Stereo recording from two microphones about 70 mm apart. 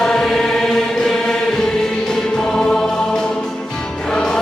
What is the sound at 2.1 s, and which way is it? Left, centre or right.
Music, centre.